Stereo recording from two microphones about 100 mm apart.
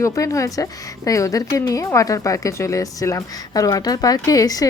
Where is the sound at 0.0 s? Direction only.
30° left (ahead or behind).